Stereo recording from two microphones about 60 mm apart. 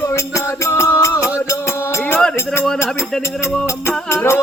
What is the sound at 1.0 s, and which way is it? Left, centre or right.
Music, left.